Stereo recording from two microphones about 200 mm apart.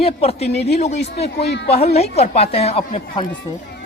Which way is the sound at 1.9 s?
30° left (ahead or behind).